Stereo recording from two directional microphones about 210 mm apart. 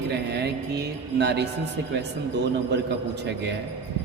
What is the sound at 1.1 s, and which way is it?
A man's voice, 50° right (ahead or behind).